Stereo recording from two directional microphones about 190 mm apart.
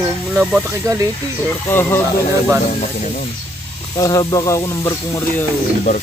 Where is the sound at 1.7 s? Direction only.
10° left (ahead or behind).